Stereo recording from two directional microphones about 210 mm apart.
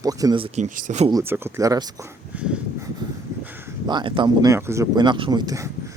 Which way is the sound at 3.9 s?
20° right (ahead or behind).